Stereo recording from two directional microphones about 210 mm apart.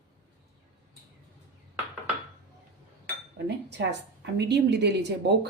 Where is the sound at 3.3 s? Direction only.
55° right (ahead or behind).